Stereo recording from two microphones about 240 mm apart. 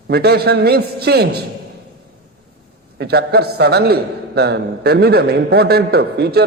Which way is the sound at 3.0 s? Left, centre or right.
Right.